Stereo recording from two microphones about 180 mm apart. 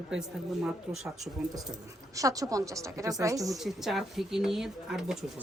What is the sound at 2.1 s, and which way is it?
A woman's voice, 20° right (ahead or behind).